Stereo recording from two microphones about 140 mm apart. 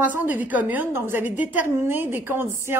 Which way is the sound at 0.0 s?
10° right (ahead or behind).